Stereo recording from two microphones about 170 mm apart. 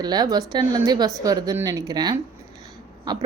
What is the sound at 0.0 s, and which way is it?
A woman's voice, 25° right (ahead or behind).